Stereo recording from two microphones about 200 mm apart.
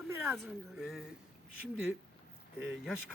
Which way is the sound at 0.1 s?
10° right (ahead or behind).